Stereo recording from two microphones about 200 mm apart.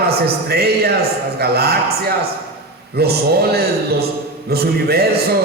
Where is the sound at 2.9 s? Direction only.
50° right (ahead or behind).